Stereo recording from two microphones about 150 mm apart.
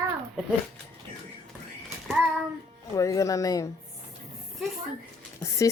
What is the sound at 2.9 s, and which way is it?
Speech, 20° left (ahead or behind).